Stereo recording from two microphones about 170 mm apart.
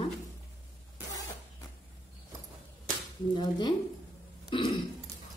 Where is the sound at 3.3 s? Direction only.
25° left (ahead or behind).